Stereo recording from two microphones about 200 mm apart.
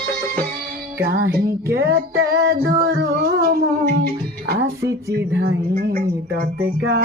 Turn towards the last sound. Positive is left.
turn(degrees=-60)  # may be behind; listen again after turning